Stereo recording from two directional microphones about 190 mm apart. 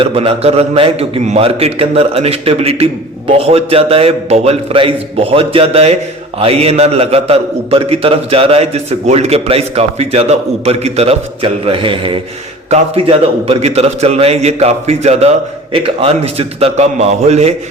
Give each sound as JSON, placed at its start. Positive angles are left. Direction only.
{"t": 0.0, "sound": "a man's voice", "side_deg": -30}